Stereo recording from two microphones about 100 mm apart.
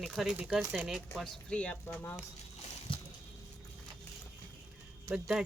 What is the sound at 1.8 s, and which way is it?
Speech, 20° left (ahead or behind).